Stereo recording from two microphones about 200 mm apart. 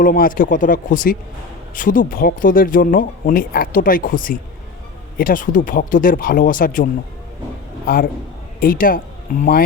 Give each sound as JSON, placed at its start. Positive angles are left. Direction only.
{"t": 0.0, "sound": "speech", "side_deg": 45}
{"t": 8.6, "sound": "speech", "side_deg": 45}